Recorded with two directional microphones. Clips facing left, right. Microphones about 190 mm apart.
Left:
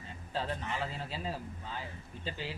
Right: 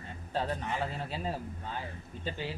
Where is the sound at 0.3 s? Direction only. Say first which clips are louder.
Right 3 dB; 55° right (ahead or behind).